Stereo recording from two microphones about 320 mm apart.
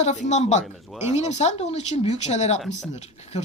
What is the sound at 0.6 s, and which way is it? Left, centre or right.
Speech, centre.